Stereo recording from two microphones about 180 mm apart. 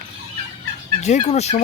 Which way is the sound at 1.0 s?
40° left (ahead or behind).